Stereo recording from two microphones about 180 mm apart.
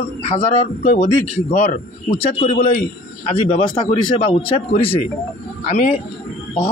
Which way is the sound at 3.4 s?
25° left (ahead or behind).